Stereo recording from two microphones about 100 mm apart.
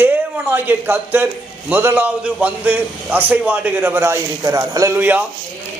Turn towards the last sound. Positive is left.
turn(degrees=-20)  # may be behind; listen again after turning